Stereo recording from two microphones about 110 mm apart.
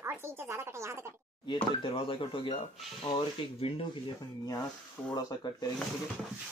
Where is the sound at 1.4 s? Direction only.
50° left (ahead or behind).